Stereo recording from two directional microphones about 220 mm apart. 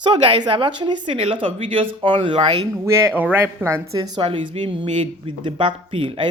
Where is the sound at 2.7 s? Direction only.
10° right (ahead or behind).